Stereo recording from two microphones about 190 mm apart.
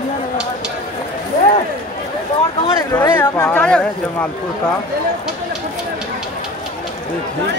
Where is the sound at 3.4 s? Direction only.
10° left (ahead or behind).